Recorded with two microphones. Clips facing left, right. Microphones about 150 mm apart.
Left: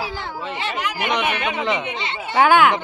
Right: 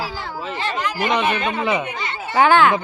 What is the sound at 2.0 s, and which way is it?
Speech, 25° left (ahead or behind).